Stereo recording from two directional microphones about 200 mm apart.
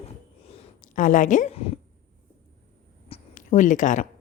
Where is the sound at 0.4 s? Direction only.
35° left (ahead or behind).